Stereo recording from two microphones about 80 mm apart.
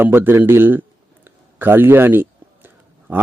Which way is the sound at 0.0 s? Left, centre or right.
Right.